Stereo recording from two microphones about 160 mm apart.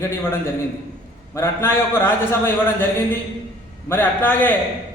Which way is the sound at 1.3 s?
15° left (ahead or behind).